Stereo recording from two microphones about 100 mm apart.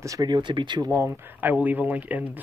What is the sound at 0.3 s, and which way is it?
Speech, 55° right (ahead or behind).